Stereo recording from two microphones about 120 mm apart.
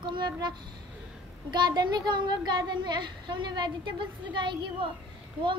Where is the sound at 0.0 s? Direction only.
40° right (ahead or behind).